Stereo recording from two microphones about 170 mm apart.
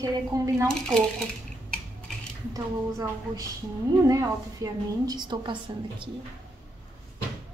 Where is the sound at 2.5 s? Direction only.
20° right (ahead or behind).